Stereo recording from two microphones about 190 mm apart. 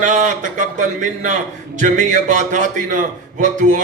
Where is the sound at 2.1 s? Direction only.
40° right (ahead or behind).